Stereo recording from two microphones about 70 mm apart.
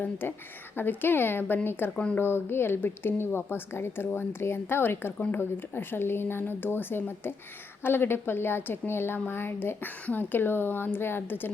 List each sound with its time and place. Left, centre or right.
0.0 s a woman's voice: left